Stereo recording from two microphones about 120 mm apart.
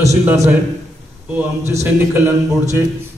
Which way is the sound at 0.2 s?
15° right (ahead or behind).